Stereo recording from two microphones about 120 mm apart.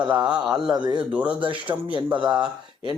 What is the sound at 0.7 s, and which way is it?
Speech, 40° right (ahead or behind).